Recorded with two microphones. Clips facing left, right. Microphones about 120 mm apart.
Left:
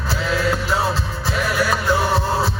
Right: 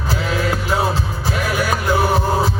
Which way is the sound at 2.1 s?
15° right (ahead or behind).